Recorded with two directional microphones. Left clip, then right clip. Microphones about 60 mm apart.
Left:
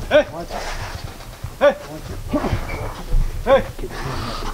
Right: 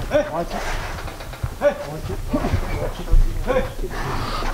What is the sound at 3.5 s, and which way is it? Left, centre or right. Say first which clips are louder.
Speech: left 6 dB; centre.